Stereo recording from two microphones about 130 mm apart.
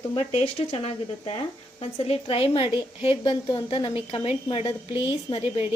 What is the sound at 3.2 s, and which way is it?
A woman's voice, 35° left (ahead or behind).